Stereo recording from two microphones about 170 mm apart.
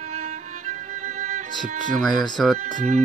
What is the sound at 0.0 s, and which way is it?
Music, 40° right (ahead or behind).